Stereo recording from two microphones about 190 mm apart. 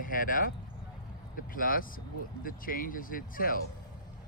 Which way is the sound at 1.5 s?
45° left (ahead or behind).